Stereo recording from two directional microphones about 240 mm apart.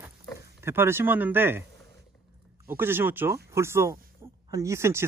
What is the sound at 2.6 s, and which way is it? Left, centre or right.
Speech, centre.